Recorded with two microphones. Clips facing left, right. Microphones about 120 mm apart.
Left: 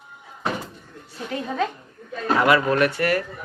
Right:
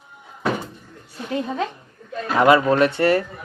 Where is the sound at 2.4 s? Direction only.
25° right (ahead or behind).